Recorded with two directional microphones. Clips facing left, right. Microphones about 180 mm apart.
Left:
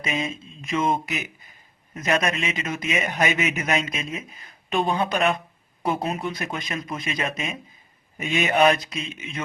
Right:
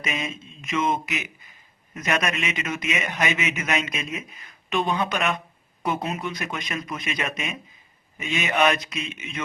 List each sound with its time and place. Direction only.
0.0 s a man's voice: 30° left (ahead or behind)